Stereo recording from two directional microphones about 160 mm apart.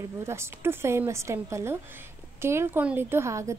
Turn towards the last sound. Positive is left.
turn(degrees=-20)  # may be behind; listen again after turning